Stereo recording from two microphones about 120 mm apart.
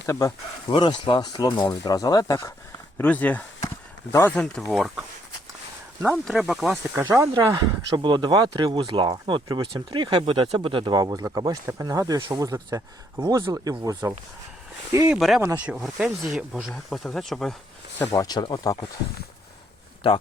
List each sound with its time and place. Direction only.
0.0 s speech: 25° left (ahead or behind)
0.7 s speech: 45° left (ahead or behind); by 2.5 s 30° left (ahead or behind)
3.0 s speech: 15° left (ahead or behind)
4.4 s speech: 5° left (ahead or behind)
6.2 s speech: centre (ahead or behind)
7.1 s speech: 25° right (ahead or behind)
7.5 s speech: 40° right (ahead or behind)
15.1 s speech: centre (ahead or behind)
15.4 s speech: 15° right (ahead or behind); by 17.5 s centre (ahead or behind)
18.1 s speech: 30° left (ahead or behind)